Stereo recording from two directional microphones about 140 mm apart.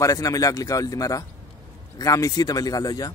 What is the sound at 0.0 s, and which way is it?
A man's voice, 25° left (ahead or behind).